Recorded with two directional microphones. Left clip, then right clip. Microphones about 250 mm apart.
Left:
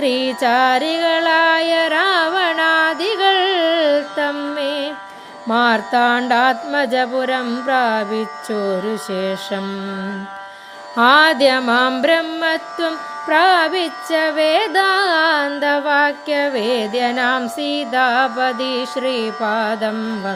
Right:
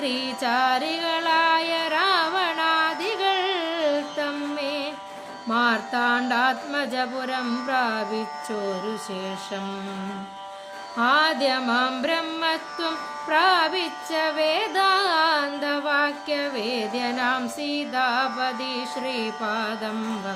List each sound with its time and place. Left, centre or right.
0.0 s music: left
10.9 s music: left